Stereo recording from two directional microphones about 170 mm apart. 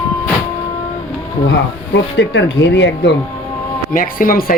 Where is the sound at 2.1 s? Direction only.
90° left.